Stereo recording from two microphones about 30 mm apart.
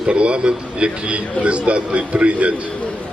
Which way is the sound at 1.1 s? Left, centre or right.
Right.